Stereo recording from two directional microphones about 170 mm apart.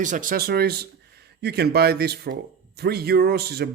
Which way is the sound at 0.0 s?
50° right (ahead or behind).